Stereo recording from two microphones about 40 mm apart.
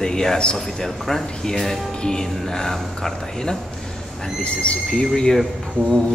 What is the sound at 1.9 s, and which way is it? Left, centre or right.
Music, left.